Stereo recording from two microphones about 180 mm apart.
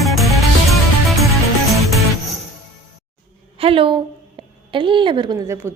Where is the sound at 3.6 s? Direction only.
30° right (ahead or behind); by 5.7 s 15° right (ahead or behind).